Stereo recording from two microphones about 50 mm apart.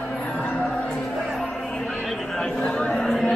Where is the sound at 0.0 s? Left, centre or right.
Centre.